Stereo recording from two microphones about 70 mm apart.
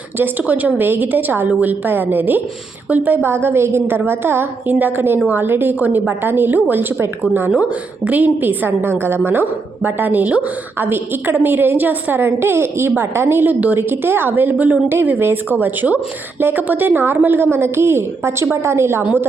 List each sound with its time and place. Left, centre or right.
0.2 s a woman's voice: right